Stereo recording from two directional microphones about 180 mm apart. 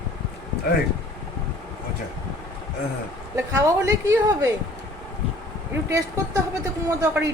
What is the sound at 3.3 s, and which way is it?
A woman's voice, 15° right (ahead or behind).